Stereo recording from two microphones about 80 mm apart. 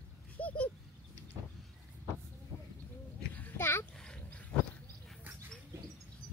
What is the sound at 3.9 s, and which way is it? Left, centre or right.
Dog, centre.